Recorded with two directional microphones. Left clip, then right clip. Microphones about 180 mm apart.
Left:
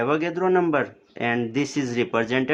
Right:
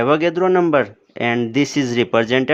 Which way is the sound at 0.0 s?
50° right (ahead or behind).